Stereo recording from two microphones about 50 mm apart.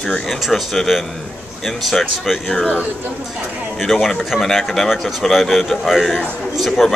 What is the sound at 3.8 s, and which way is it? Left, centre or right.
Speech, centre.